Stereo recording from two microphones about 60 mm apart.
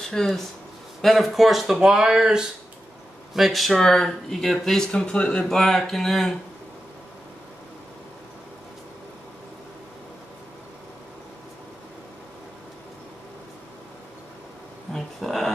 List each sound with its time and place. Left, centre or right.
0.0 s speech: centre
3.3 s speech: centre
4.9 s a man's voice: centre
5.5 s speech: centre
14.9 s a sound: centre